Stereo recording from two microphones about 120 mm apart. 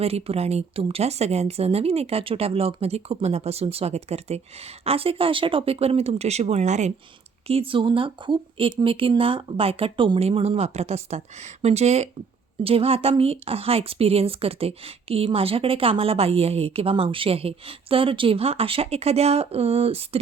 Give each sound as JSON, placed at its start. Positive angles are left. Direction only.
{"t": 0.0, "sound": "speech", "side_deg": -55}
{"t": 7.4, "sound": "speech", "side_deg": -50}
{"t": 12.6, "sound": "speech", "side_deg": -55}